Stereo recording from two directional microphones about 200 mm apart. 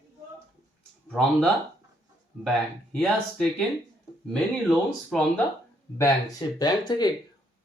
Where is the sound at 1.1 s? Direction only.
5° left (ahead or behind).